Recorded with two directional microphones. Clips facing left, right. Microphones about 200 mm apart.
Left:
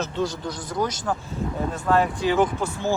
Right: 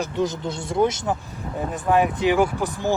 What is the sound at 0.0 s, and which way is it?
Speech, 20° right (ahead or behind).